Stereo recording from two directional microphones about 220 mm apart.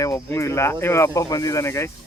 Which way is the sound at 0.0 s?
15° left (ahead or behind).